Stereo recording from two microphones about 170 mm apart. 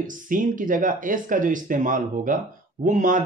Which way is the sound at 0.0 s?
50° right (ahead or behind).